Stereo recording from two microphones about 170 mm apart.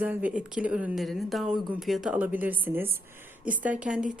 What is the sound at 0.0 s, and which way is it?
Speech, 10° right (ahead or behind).